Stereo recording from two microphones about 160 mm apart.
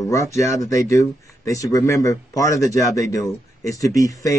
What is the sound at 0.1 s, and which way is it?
Speech, 20° left (ahead or behind).